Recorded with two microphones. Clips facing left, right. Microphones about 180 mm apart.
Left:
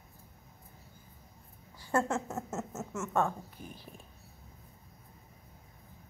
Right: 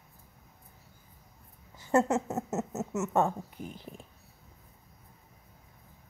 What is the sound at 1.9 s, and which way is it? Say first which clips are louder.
Speech: right 5 dB; 20° right (ahead or behind).